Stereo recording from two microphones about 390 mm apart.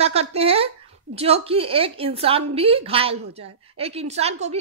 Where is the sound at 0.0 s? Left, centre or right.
Centre.